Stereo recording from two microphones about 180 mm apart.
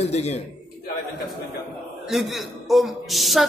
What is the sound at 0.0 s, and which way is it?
Speech, 35° left (ahead or behind).